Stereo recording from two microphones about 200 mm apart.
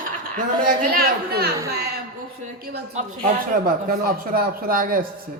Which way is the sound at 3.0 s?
40° right (ahead or behind).